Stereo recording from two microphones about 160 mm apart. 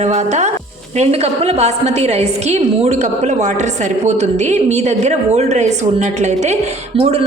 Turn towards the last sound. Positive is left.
turn(degrees=-40)  # may be behind; listen again after turning